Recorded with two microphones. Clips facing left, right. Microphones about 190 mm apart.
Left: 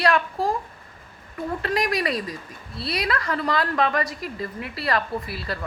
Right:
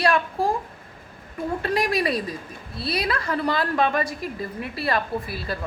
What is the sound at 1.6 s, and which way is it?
A woman's voice, 25° right (ahead or behind).